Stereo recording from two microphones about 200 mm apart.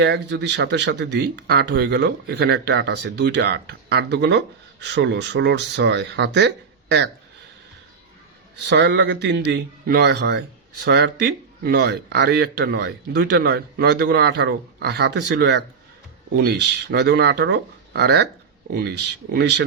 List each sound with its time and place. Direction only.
0.0 s speech: 60° right (ahead or behind)
8.6 s speech: 60° right (ahead or behind)